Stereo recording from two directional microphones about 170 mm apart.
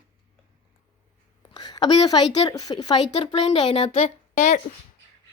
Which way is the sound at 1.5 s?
25° left (ahead or behind).